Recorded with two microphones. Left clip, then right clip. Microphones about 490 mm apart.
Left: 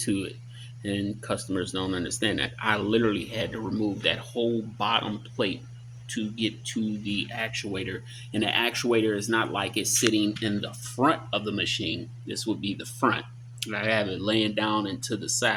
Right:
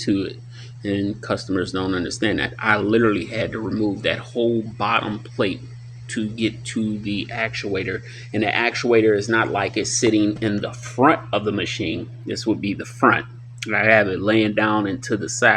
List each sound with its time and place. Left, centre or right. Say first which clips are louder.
0.0 s speech: right 7 dB; left